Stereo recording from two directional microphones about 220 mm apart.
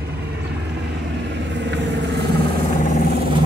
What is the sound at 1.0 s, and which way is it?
Vehicle, 50° right (ahead or behind).